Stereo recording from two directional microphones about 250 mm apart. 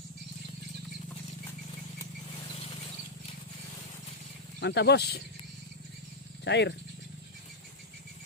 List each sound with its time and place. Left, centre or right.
2.3 s a sound: left
4.6 s speech: left
6.4 s speech: left